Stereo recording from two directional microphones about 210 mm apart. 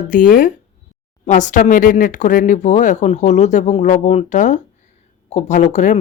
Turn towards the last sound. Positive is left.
turn(degrees=35)  # may be behind; listen again after turning